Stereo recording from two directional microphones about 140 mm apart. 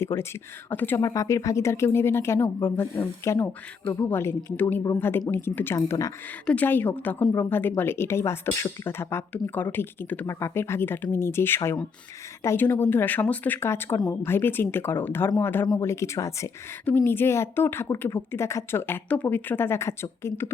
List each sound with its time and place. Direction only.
0.0 s speech: 20° left (ahead or behind)
6.4 s speech: 10° left (ahead or behind)